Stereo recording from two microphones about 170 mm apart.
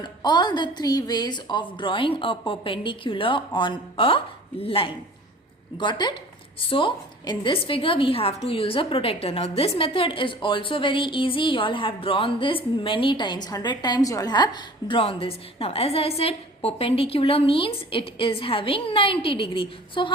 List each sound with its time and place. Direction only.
0.0 s a woman's voice: 25° left (ahead or behind)